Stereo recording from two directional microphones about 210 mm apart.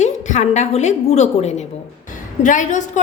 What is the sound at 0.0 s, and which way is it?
A woman's voice, 35° left (ahead or behind).